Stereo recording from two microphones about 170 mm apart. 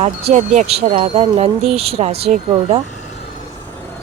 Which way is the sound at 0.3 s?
45° right (ahead or behind).